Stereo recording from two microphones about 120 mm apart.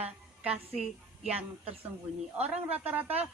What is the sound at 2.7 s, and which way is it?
Speech, 15° right (ahead or behind).